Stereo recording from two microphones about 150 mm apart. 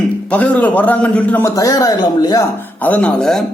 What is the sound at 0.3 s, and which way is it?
A man's voice, 10° left (ahead or behind).